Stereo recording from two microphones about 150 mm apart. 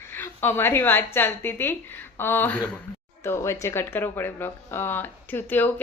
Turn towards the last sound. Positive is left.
turn(degrees=15)  # may be behind; listen again after turning